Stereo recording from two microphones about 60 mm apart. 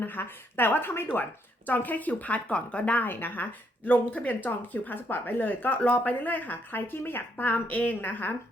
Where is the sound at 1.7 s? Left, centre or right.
Left.